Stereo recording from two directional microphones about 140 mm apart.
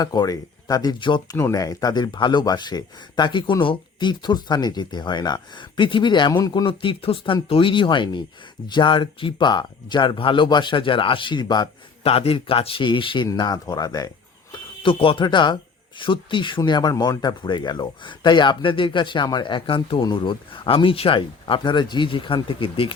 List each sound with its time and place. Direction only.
0.0 s speech: 25° left (ahead or behind)
1.4 s speech: 20° left (ahead or behind)
12.0 s speech: 45° left (ahead or behind); by 14.1 s 25° left (ahead or behind)
14.5 s speech: 40° left (ahead or behind)